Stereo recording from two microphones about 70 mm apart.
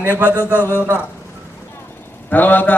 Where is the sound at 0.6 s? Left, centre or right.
Left.